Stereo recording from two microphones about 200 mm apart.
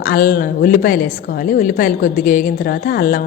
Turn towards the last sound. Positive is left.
turn(degrees=45)  # may be behind; listen again after turning